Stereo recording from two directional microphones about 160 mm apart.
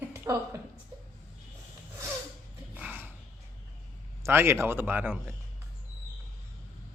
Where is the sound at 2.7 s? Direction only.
10° right (ahead or behind).